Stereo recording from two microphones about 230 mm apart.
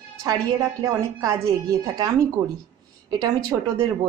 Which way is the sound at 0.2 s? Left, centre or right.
Centre.